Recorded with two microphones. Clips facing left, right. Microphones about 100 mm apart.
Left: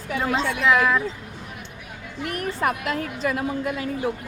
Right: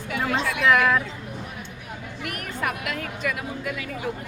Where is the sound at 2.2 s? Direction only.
30° left (ahead or behind).